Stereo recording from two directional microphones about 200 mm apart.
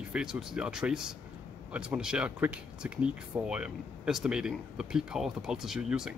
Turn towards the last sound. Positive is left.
turn(degrees=-5)  # may be behind; listen again after turning